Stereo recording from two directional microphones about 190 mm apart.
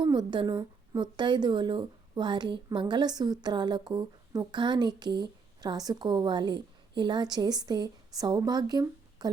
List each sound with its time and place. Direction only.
0.0 s a woman's voice: 25° right (ahead or behind)